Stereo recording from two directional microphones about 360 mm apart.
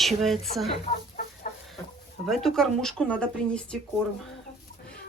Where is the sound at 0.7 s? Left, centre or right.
Centre.